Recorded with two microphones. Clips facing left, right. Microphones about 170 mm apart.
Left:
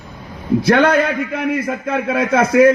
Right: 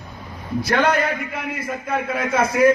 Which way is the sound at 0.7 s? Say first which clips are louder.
Left 5 dB; 65° left (ahead or behind).